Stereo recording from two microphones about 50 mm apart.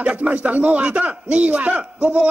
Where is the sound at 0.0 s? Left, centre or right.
Right.